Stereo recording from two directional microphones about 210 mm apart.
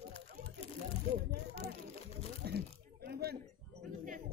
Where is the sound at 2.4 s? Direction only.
50° right (ahead or behind).